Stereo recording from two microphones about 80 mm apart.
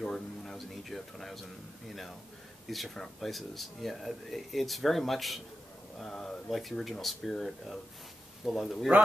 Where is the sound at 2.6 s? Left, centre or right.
Centre.